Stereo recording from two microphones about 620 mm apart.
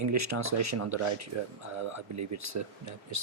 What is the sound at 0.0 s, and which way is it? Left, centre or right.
Speech, right.